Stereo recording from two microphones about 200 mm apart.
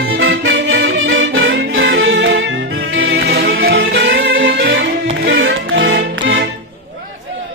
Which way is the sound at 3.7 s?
65° right (ahead or behind).